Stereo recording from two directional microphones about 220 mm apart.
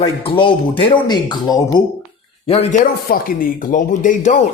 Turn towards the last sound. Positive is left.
turn(degrees=35)  # may be behind; listen again after turning